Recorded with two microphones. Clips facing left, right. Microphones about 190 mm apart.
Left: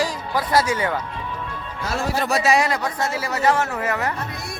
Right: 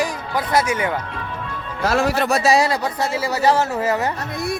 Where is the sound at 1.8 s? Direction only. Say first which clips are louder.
Right 5 dB; 80° right.